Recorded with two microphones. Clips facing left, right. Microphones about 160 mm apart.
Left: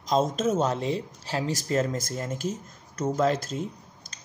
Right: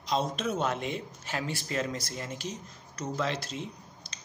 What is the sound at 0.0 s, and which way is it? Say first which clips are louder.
Speech: left 6 dB; 45° left (ahead or behind).